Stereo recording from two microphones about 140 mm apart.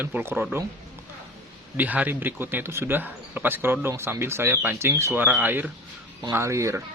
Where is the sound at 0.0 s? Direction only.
15° right (ahead or behind).